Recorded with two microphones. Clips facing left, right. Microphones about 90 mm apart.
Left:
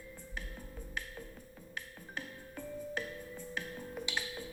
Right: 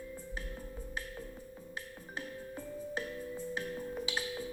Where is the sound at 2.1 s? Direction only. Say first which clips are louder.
Right 3 dB; 30° right (ahead or behind).